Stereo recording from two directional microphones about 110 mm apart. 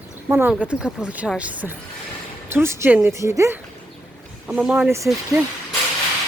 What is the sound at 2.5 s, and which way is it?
Speech, 20° right (ahead or behind).